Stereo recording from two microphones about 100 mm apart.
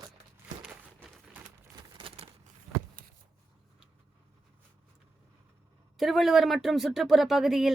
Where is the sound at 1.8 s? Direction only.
55° right (ahead or behind).